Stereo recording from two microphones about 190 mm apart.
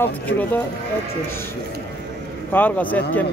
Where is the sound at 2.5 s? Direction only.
10° left (ahead or behind).